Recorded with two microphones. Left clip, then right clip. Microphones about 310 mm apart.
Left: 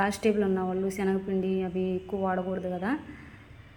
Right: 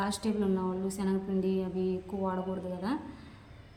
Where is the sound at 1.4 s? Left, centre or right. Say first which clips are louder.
Left 2 dB; left.